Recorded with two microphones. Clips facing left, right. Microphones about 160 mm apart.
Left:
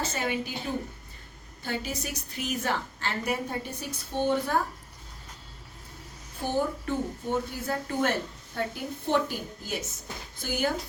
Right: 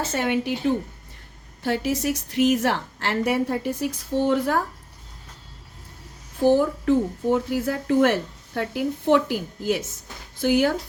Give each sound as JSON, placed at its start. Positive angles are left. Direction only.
{"t": 0.1, "sound": "a woman's voice", "side_deg": -70}
{"t": 1.6, "sound": "a woman's voice", "side_deg": -80}
{"t": 6.4, "sound": "a woman's voice", "side_deg": -90}
{"t": 10.4, "sound": "speech", "side_deg": -80}